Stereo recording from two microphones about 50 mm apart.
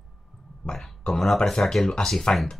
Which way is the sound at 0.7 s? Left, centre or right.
Centre.